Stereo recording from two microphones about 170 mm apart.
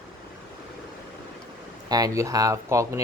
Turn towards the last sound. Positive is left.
turn(degrees=-20)  # may be behind; listen again after turning